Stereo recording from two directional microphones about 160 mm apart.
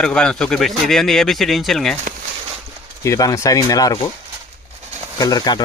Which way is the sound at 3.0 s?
20° left (ahead or behind).